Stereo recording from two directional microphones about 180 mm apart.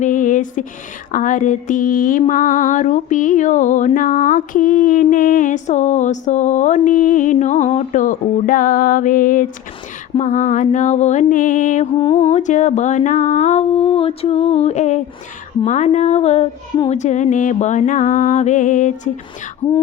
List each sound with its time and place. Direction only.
0.0 s a sound: 45° left (ahead or behind)
1.1 s mantra: 45° left (ahead or behind)
12.1 s humming: 40° left (ahead or behind)
16.9 s mantra: 40° left (ahead or behind)